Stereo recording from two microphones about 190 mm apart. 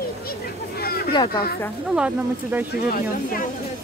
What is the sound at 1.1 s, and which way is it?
Speech, 25° left (ahead or behind).